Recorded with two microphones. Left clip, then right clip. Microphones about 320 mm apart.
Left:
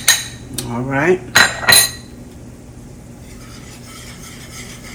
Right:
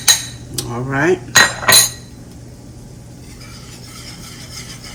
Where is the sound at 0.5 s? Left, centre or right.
Centre.